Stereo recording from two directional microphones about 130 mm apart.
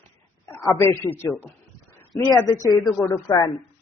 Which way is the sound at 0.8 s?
20° left (ahead or behind).